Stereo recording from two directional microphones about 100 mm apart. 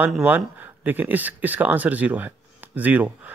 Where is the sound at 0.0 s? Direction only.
20° right (ahead or behind).